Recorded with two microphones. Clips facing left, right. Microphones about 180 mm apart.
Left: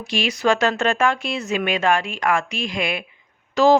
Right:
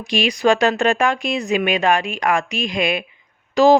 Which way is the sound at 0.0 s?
15° right (ahead or behind).